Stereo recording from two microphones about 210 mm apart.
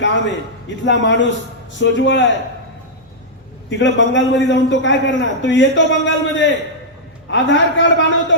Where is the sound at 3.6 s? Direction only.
60° left (ahead or behind).